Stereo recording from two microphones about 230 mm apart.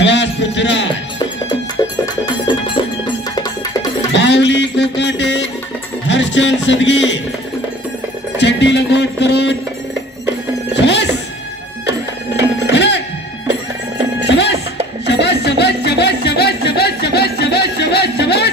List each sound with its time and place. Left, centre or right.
0.0 s music: left
2.2 s music: centre
4.2 s music: left
8.4 s music: left
10.7 s music: left
12.4 s music: left
15.0 s music: left